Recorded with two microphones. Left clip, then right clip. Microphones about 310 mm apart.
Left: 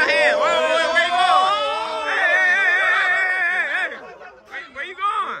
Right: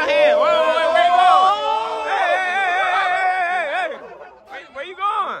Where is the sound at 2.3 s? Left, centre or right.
Centre.